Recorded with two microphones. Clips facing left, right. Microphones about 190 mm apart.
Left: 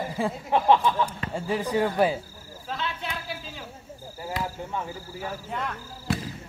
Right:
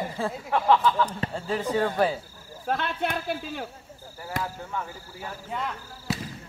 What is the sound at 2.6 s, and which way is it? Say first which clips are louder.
Speech: right 5 dB; 55° right (ahead or behind).